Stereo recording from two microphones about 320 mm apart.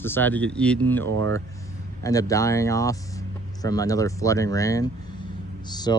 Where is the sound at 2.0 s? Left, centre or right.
Centre.